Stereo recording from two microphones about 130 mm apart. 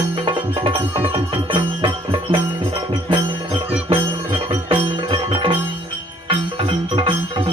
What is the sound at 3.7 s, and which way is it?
Music, 45° right (ahead or behind).